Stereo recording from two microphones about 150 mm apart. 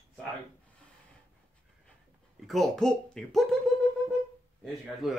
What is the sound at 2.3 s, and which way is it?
Speech, centre (ahead or behind).